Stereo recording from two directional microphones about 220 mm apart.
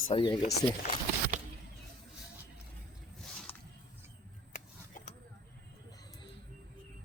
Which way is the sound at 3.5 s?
10° left (ahead or behind).